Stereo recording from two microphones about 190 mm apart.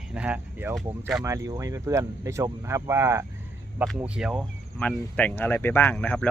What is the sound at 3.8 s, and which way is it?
Speech, 5° right (ahead or behind).